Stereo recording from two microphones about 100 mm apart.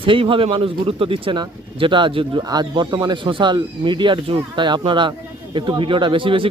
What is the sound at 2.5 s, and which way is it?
Speech, 45° right (ahead or behind).